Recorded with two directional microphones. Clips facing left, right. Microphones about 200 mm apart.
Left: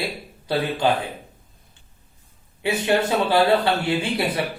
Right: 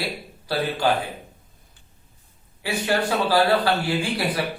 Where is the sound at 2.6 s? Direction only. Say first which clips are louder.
Left 3 dB; 20° left (ahead or behind).